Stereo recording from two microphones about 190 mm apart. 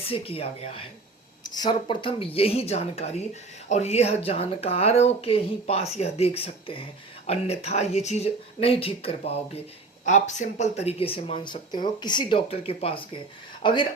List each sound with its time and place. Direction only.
0.0 s speech: 30° left (ahead or behind)
1.5 s speech: 20° left (ahead or behind)